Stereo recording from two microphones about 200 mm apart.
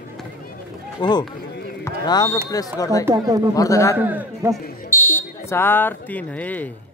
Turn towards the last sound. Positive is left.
turn(degrees=10)  # may be behind; listen again after turning